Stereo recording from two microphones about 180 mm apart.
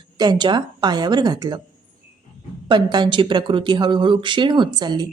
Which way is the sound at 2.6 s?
25° right (ahead or behind).